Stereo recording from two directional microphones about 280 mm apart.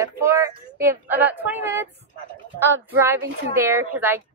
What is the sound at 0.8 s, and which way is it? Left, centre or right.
A woman's voice, centre.